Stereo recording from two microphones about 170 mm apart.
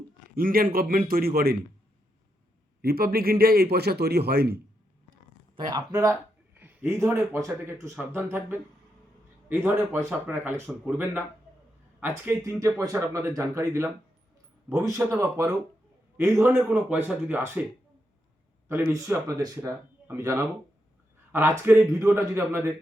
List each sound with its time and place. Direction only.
0.3 s speech: 60° right (ahead or behind)
2.8 s speech: 65° right (ahead or behind)
5.5 s speech: 25° right (ahead or behind)
6.6 s a man's voice: 10° right (ahead or behind)
18.7 s speech: 20° right (ahead or behind)